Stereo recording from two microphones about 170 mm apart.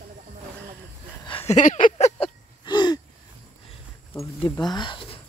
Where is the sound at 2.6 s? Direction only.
25° left (ahead or behind).